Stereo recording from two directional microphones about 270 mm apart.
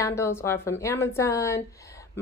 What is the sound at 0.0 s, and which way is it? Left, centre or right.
A woman's voice, centre.